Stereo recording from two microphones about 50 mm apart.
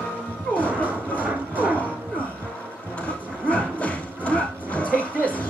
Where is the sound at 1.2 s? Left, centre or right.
Right.